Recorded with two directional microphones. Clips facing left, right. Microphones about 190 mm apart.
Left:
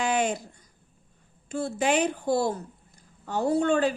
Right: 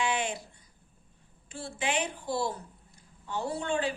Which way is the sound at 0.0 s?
40° left (ahead or behind).